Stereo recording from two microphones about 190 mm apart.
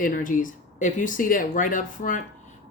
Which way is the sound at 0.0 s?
45° left (ahead or behind).